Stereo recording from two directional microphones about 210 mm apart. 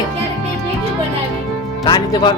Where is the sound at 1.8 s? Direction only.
20° left (ahead or behind).